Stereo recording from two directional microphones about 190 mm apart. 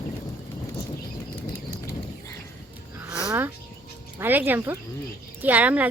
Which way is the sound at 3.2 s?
10° right (ahead or behind).